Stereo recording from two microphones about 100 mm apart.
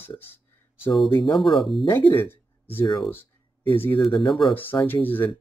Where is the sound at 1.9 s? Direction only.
25° left (ahead or behind).